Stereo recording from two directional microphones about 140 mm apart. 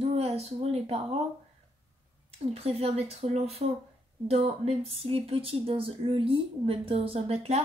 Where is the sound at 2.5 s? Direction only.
45° right (ahead or behind).